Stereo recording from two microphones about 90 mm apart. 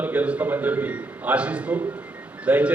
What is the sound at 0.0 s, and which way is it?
A man's voice, 20° right (ahead or behind).